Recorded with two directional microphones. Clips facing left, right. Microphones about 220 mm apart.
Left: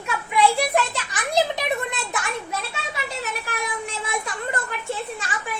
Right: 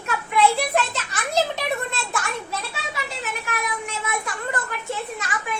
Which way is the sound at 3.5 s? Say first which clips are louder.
Even; 30° left (ahead or behind).